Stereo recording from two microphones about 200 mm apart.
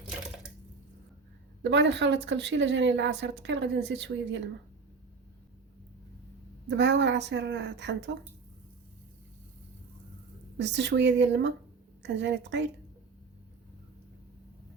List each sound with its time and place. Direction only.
1.6 s speech: 65° right (ahead or behind)
6.7 s speech: 60° right (ahead or behind)
10.6 s speech: 60° right (ahead or behind)